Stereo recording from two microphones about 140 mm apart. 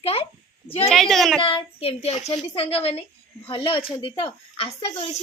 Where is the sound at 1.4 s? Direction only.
40° left (ahead or behind).